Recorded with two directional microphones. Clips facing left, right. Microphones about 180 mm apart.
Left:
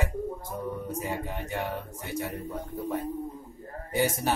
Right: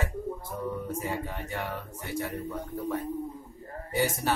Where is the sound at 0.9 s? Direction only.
15° left (ahead or behind).